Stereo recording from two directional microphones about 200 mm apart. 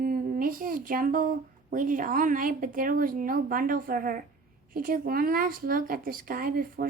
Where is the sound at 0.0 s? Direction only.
45° right (ahead or behind).